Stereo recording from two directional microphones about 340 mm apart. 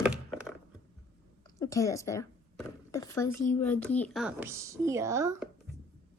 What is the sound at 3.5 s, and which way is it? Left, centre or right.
Speech, centre.